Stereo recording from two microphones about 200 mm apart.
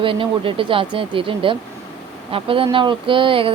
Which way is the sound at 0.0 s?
25° right (ahead or behind).